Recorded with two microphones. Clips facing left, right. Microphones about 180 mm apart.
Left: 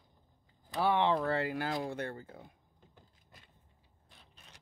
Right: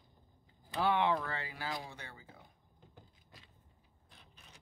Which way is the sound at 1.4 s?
55° left (ahead or behind).